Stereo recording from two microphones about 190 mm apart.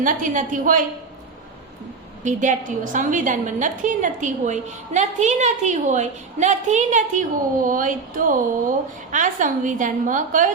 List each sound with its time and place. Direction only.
0.0 s a woman's voice: 45° right (ahead or behind)
2.2 s a woman's voice: 40° right (ahead or behind)